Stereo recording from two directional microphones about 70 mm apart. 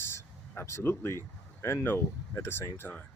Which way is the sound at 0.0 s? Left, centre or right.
Left.